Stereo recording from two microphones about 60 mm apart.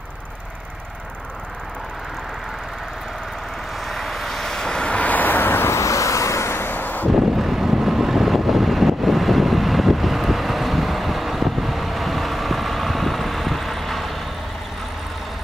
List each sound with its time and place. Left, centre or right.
3.8 s vehicle: centre; by 5.8 s left
5.8 s vehicle: left
7.1 s vehicle: centre